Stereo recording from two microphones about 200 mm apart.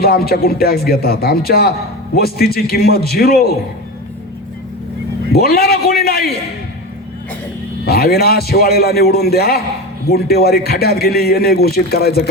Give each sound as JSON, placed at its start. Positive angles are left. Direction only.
{"t": 0.0, "sound": "a man's voice", "side_deg": 50}
{"t": 5.3, "sound": "a man's voice", "side_deg": 50}
{"t": 7.9, "sound": "a man's voice", "side_deg": 50}